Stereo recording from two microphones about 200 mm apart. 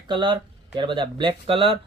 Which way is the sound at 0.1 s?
25° right (ahead or behind).